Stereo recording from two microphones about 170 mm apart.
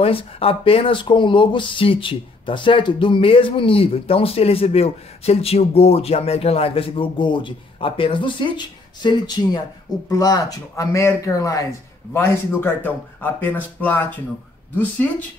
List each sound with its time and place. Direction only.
0.0 s speech: 35° left (ahead or behind); by 15.2 s 10° left (ahead or behind)